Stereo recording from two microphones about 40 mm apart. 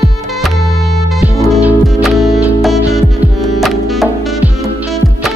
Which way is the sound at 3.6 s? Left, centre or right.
Centre.